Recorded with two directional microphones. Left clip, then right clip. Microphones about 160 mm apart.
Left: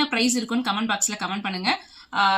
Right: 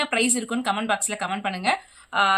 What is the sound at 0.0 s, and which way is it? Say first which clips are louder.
A woman's voice: even; 20° right (ahead or behind).